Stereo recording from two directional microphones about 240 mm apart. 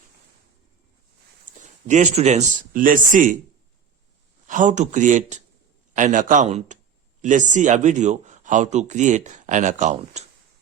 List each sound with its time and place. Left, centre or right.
1.5 s speech: right
4.4 s speech: right